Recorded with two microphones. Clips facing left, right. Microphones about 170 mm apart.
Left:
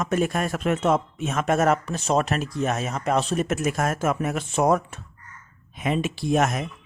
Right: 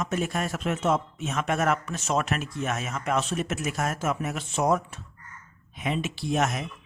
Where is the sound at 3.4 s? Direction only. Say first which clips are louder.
Left 5 dB; 50° left (ahead or behind).